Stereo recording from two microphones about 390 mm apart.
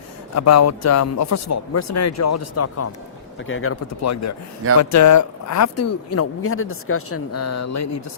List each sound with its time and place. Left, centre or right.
0.3 s speech: left